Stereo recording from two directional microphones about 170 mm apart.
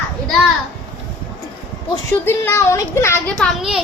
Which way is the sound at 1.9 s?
15° left (ahead or behind).